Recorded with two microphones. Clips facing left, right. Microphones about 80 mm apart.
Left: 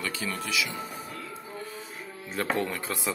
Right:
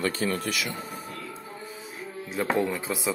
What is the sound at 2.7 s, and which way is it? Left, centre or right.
Speech, centre.